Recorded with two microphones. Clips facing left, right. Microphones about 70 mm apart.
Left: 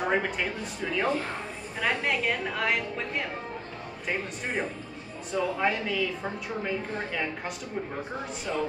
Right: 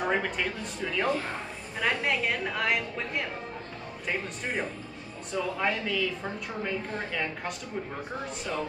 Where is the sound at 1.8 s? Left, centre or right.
Centre.